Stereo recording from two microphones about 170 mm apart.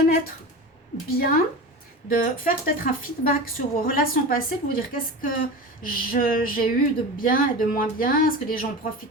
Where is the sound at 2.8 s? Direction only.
60° left (ahead or behind).